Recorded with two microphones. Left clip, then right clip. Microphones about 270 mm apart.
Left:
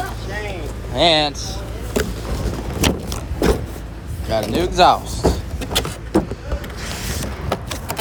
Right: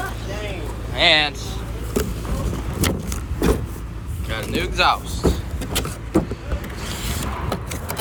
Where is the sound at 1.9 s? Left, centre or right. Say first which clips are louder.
Left 3 dB; centre.